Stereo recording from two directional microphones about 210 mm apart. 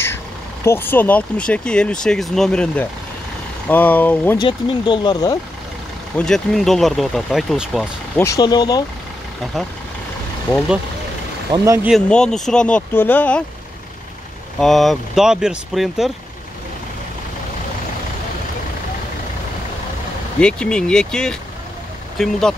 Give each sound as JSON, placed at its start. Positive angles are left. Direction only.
{"t": 0.7, "sound": "speech", "side_deg": 10}
{"t": 4.4, "sound": "speech", "side_deg": 20}
{"t": 6.1, "sound": "speech", "side_deg": 5}
{"t": 8.2, "sound": "speech", "side_deg": 15}
{"t": 11.5, "sound": "speech", "side_deg": -15}
{"t": 11.9, "sound": "speech", "side_deg": 5}
{"t": 14.6, "sound": "speech", "side_deg": 0}
{"t": 20.3, "sound": "speech", "side_deg": 5}